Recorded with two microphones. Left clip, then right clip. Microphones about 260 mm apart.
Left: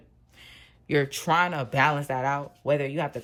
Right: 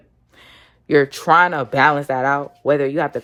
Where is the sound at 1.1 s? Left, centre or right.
Centre.